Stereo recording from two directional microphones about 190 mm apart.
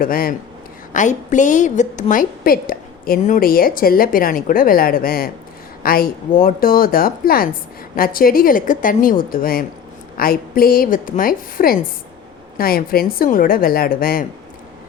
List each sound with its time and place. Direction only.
0.0 s a woman's voice: 50° left (ahead or behind)